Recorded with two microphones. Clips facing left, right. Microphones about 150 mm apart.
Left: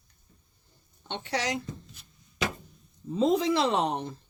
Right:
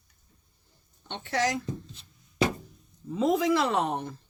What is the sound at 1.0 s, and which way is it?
Speech, 20° left (ahead or behind).